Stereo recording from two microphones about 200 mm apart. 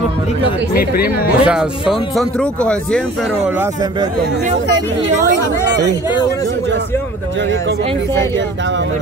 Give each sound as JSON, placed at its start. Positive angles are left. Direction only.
{"t": 0.7, "sound": "speech", "side_deg": 50}
{"t": 1.4, "sound": "speech", "side_deg": -5}